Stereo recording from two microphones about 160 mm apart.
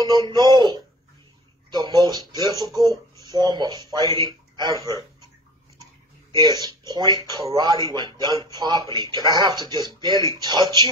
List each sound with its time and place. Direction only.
0.0 s speech: 25° right (ahead or behind)
6.3 s speech: 25° right (ahead or behind)